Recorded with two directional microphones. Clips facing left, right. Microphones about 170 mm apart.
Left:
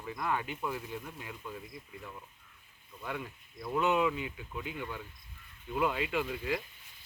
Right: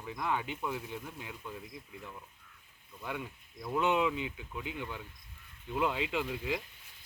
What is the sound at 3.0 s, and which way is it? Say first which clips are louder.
Speech: even; 10° right (ahead or behind).